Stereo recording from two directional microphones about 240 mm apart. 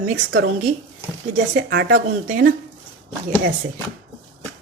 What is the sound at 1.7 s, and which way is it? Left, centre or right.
Speech, right.